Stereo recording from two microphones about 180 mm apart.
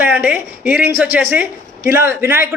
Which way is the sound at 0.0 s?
10° right (ahead or behind).